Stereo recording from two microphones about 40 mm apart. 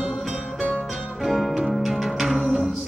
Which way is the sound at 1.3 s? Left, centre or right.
Centre.